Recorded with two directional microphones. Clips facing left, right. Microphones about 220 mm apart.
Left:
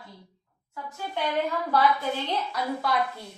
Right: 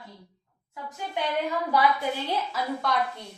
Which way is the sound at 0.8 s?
15° right (ahead or behind).